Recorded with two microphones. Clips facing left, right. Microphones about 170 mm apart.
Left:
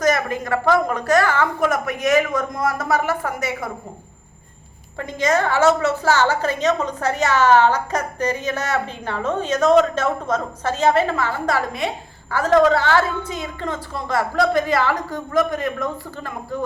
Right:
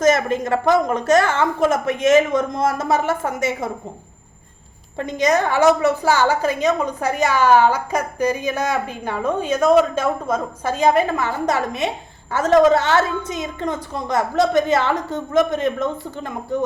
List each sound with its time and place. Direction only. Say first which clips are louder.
0.0 s a woman's voice: right 3 dB; 25° right (ahead or behind)
4.9 s a woman's voice: right 2 dB; 20° right (ahead or behind)